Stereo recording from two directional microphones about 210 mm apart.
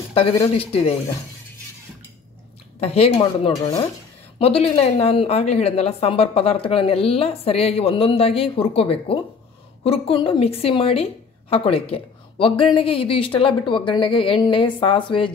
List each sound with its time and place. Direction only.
0.1 s a woman's voice: 25° left (ahead or behind)
2.8 s a woman's voice: 30° left (ahead or behind)